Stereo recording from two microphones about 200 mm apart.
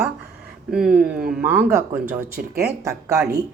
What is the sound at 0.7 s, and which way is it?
A woman's voice, 5° right (ahead or behind).